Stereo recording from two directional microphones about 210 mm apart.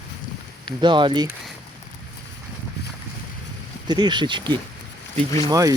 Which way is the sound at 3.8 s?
20° right (ahead or behind).